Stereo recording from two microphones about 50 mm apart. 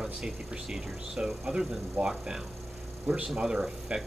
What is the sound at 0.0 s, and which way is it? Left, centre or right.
Speech, centre.